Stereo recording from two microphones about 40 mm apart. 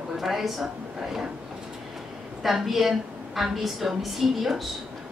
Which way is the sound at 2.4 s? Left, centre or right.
Centre.